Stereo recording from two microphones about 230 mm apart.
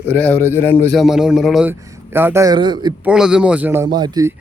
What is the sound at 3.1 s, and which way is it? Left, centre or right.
Speech, centre.